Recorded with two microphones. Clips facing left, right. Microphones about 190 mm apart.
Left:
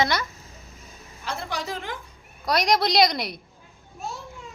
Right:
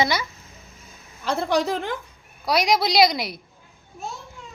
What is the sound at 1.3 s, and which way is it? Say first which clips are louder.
Speech: right 9 dB; 65° right (ahead or behind).